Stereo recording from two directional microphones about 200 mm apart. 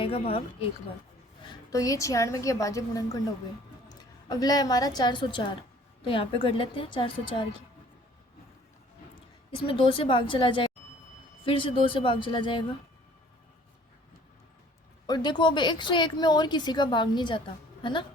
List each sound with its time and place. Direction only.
0.0 s a woman's voice: 30° left (ahead or behind)
1.7 s a woman's voice: 15° left (ahead or behind)
9.6 s a woman's voice: 25° left (ahead or behind)
15.0 s a woman's voice: 20° left (ahead or behind)